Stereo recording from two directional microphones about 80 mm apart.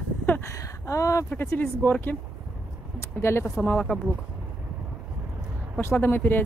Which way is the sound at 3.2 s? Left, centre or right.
Left.